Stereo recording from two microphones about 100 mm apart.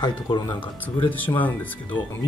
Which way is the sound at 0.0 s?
50° left (ahead or behind).